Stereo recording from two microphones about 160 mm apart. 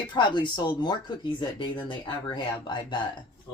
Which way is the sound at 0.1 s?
30° left (ahead or behind).